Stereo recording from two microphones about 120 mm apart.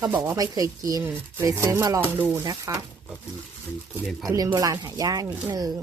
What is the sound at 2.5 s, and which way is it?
Rub, 30° right (ahead or behind).